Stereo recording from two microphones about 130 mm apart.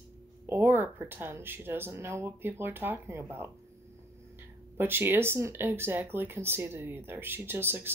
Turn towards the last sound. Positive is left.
turn(degrees=-15)  # may be behind; listen again after turning